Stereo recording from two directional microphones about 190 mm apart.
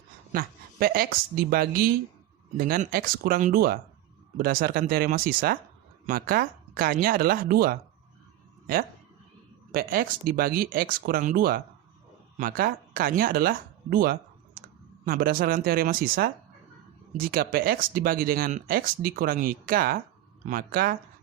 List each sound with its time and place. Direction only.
0.3 s speech: 50° right (ahead or behind)